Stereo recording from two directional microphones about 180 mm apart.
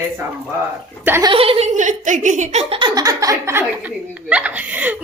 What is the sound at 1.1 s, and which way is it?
Speech, 15° right (ahead or behind).